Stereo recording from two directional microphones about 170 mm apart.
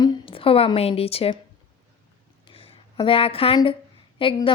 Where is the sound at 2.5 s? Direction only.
30° left (ahead or behind).